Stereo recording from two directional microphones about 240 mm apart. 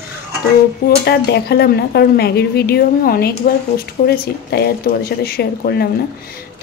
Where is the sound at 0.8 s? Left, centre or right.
Left.